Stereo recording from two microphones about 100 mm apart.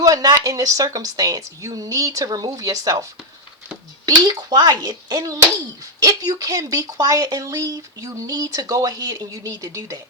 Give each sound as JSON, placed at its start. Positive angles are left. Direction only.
{"t": 0.0, "sound": "speech", "side_deg": -40}